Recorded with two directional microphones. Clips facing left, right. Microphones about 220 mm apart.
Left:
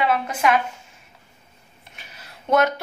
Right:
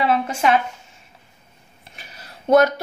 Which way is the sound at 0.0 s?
30° right (ahead or behind).